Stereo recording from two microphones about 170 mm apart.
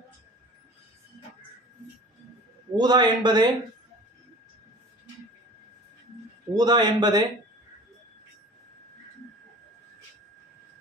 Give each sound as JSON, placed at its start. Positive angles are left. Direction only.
{"t": 2.7, "sound": "speech", "side_deg": -25}
{"t": 6.5, "sound": "speech", "side_deg": -25}